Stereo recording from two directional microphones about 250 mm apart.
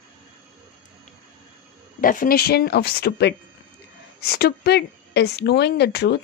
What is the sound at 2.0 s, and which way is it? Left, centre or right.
Speech, left.